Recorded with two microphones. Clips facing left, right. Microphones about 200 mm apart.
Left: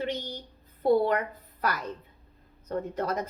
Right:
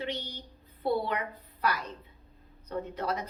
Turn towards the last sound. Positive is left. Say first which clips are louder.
# left 3 dB
turn(degrees=45)  # may be behind; listen again after turning